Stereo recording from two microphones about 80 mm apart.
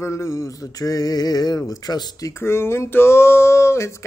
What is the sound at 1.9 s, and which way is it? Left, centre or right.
Speech, left.